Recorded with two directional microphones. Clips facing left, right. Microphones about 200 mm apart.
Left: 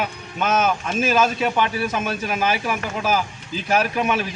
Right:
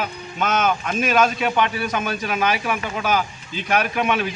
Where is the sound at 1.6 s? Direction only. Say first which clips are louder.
Even; 30° left (ahead or behind).